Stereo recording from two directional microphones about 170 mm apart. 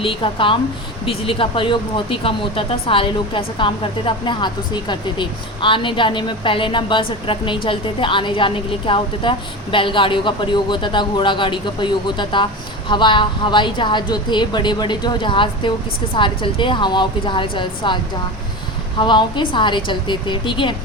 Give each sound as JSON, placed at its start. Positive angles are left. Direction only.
{"t": 0.0, "sound": "a woman's voice", "side_deg": 30}